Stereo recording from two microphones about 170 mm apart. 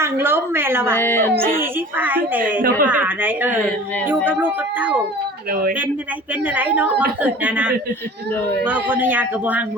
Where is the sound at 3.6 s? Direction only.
5° left (ahead or behind).